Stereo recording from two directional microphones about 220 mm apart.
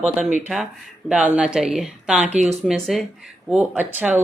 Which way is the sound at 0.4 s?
Centre (ahead or behind).